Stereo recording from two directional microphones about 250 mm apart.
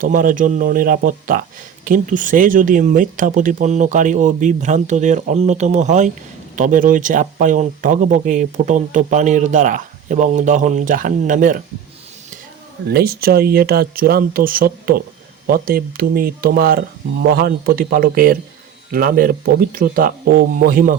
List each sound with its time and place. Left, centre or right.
0.0 s speech: right
12.9 s speech: right